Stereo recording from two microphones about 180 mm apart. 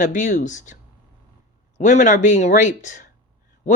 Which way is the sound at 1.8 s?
40° left (ahead or behind).